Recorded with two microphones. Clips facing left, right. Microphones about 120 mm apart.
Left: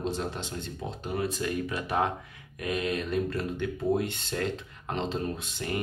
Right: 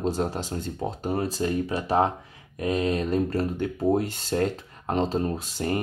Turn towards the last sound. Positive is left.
turn(degrees=-40)  # may be behind; listen again after turning